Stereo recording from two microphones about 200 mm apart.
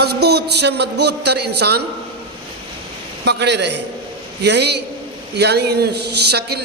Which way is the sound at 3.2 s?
60° right (ahead or behind).